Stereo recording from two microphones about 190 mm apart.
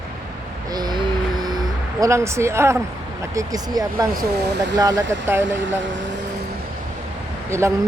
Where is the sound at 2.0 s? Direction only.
15° right (ahead or behind).